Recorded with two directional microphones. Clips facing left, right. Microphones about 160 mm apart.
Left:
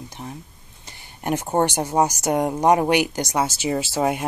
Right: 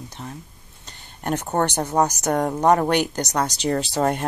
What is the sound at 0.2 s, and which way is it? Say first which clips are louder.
Speech: left 1 dB; 15° left (ahead or behind).